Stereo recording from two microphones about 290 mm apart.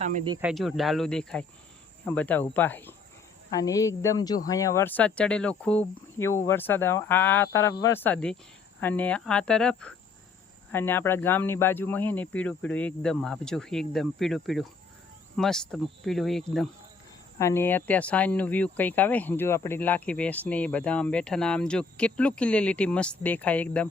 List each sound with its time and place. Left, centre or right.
0.0 s speech: right
0.3 s speech: centre